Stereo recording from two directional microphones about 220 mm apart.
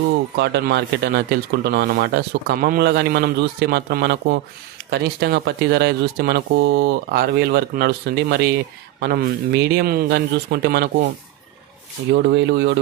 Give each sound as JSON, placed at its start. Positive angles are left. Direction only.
{"t": 0.4, "sound": "speech", "side_deg": -50}
{"t": 12.1, "sound": "speech", "side_deg": -50}